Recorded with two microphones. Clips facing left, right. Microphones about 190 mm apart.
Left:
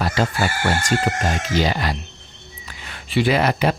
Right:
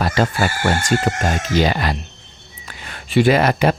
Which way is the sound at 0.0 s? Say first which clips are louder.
Right 3 dB; 55° right (ahead or behind).